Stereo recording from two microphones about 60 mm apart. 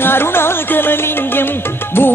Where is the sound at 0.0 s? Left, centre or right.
Left.